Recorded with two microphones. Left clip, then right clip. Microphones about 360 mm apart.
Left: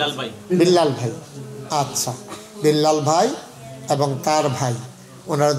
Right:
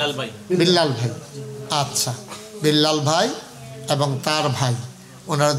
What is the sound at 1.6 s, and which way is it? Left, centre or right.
Speech, right.